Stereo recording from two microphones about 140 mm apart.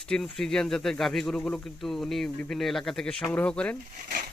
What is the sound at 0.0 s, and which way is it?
Speech, 5° left (ahead or behind).